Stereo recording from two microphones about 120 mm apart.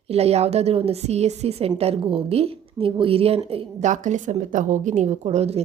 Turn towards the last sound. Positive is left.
turn(degrees=-60)  # may be behind; listen again after turning